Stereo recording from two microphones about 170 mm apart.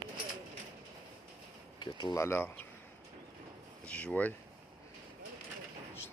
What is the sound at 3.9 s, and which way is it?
Speech, 5° left (ahead or behind).